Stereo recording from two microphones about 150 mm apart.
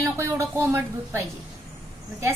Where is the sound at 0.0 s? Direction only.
20° right (ahead or behind).